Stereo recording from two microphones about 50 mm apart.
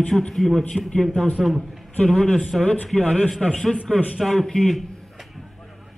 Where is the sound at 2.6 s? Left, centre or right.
Left; by 4.8 s centre.